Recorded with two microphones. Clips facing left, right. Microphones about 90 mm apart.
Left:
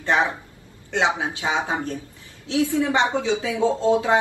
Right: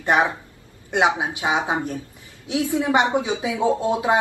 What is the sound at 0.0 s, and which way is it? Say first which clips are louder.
A woman's voice: right 2 dB; 20° right (ahead or behind).